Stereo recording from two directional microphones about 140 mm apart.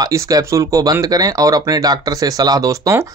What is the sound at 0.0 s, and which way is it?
Speech, 25° right (ahead or behind).